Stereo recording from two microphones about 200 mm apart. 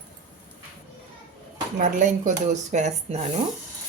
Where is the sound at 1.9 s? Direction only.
40° right (ahead or behind).